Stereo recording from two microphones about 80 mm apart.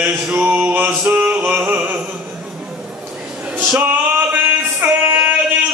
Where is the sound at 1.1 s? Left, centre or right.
Centre.